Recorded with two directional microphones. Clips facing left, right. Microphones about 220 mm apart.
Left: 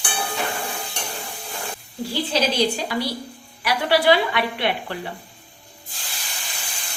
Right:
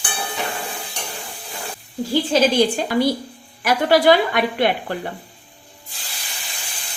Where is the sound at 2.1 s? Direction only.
50° right (ahead or behind).